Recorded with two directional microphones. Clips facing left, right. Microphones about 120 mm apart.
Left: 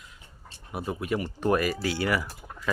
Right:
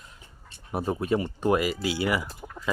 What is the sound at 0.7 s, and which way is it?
Speech, 35° right (ahead or behind).